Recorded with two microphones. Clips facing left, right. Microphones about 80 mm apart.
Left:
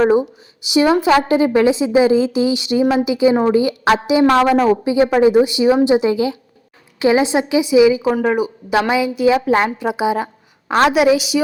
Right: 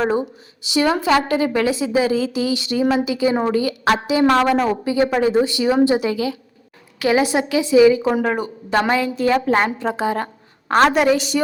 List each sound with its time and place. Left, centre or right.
0.0 s a woman's voice: centre